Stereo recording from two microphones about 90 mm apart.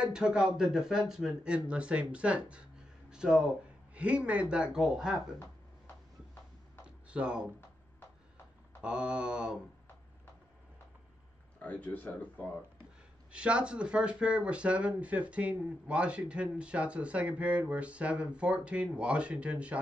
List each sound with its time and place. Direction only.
0.0 s speech: 10° right (ahead or behind)
7.1 s speech: 10° right (ahead or behind)
8.8 s speech: 10° right (ahead or behind)
11.6 s speech: 15° left (ahead or behind)
13.3 s speech: 10° right (ahead or behind)